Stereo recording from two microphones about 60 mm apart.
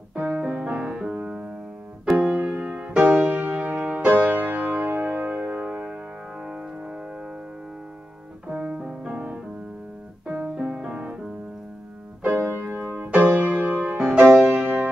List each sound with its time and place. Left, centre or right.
0.3 s music: centre
3.2 s music: right
8.5 s music: centre
10.2 s keyboard: right
12.3 s keyboard: right
12.6 s music: right
13.9 s music: centre